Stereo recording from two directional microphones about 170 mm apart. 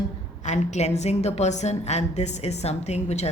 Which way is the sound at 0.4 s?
45° left (ahead or behind).